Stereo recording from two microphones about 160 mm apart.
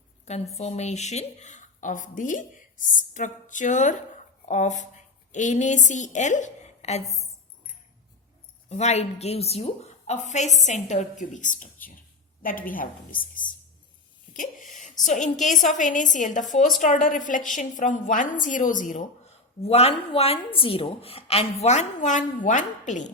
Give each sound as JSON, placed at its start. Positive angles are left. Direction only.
{"t": 0.3, "sound": "a woman's voice", "side_deg": 40}
{"t": 8.7, "sound": "a woman's voice", "side_deg": 45}
{"t": 14.3, "sound": "a sound", "side_deg": 55}
{"t": 15.0, "sound": "a woman's voice", "side_deg": 50}
{"t": 19.6, "sound": "a woman's voice", "side_deg": 40}